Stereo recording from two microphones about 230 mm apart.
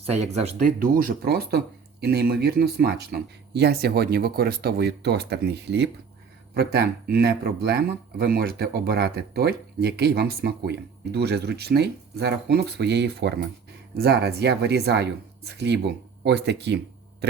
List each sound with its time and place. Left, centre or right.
0.0 s speech: right